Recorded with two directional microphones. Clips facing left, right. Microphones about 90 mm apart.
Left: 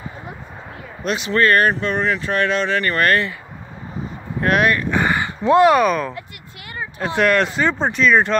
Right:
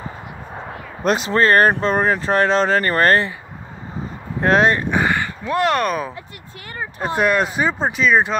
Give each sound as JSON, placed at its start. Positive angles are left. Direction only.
{"t": 1.0, "sound": "speech", "side_deg": -40}
{"t": 1.3, "sound": "speech", "side_deg": -30}
{"t": 4.4, "sound": "speech", "side_deg": -25}
{"t": 5.4, "sound": "speech", "side_deg": 20}
{"t": 5.7, "sound": "speech", "side_deg": 0}
{"t": 7.2, "sound": "speech", "side_deg": -10}